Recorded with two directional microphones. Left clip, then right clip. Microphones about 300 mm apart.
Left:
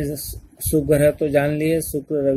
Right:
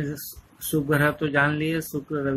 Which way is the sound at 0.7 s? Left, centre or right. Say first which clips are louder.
Left 6 dB; centre.